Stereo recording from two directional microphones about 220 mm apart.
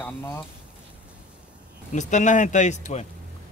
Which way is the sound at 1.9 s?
35° left (ahead or behind).